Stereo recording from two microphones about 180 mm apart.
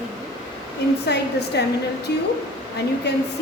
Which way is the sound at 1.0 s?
70° left (ahead or behind).